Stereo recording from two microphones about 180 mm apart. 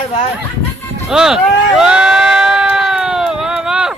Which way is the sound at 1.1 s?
5° right (ahead or behind).